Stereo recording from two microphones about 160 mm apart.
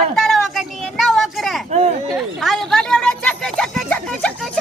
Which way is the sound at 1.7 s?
45° right (ahead or behind).